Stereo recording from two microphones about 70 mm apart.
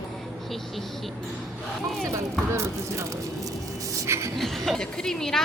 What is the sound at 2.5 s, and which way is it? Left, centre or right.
Speech, right.